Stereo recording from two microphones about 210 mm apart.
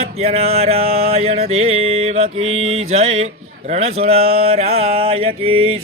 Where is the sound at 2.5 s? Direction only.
30° right (ahead or behind).